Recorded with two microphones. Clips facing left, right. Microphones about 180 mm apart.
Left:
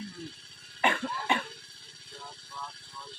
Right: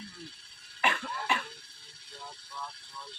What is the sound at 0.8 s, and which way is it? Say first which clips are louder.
Cough: left 3 dB; 30° left (ahead or behind).